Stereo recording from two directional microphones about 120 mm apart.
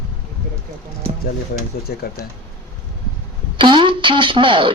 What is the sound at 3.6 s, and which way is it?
Speech, 40° right (ahead or behind).